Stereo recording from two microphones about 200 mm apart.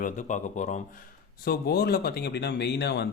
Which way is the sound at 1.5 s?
50° left (ahead or behind).